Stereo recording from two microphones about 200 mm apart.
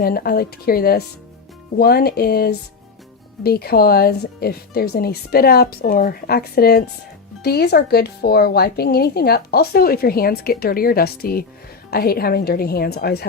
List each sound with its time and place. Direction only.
0.0 s speech: 50° left (ahead or behind)